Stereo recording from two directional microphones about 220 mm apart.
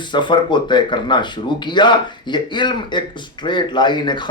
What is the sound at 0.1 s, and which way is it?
Speech, 20° left (ahead or behind).